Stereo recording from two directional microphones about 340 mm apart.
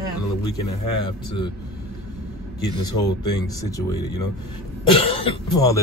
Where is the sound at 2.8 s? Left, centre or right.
Centre.